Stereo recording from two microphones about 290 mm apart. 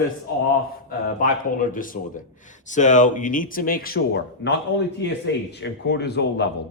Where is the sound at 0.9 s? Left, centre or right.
Left.